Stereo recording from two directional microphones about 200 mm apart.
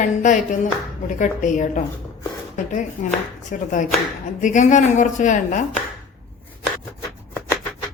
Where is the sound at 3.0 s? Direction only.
35° left (ahead or behind).